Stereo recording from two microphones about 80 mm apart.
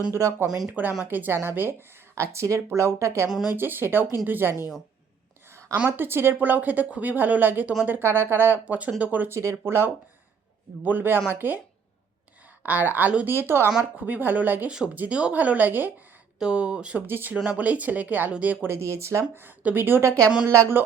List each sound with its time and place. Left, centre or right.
0.1 s speech: right
0.7 s speech: right
5.5 s a sound: right
5.7 s speech: right
9.3 s speech: right
12.6 s speech: right
16.4 s speech: centre
17.1 s speech: right
18.7 s speech: right
19.3 s speech: right